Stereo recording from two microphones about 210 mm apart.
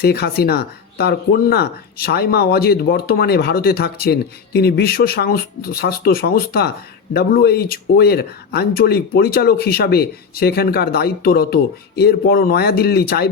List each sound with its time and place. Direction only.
0.0 s speech: 50° left (ahead or behind)